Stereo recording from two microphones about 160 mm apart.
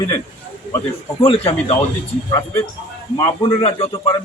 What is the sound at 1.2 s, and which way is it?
Speech, 35° left (ahead or behind).